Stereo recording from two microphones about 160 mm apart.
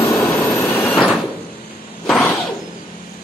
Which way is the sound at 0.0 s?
15° left (ahead or behind).